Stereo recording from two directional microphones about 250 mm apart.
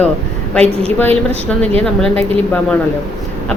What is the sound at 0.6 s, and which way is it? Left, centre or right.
Speech, right.